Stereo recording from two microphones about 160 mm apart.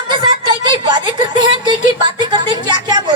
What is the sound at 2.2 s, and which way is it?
Music, 30° right (ahead or behind).